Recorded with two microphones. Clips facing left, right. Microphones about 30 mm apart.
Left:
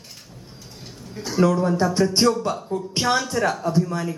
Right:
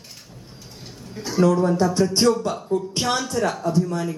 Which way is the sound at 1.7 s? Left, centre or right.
Centre.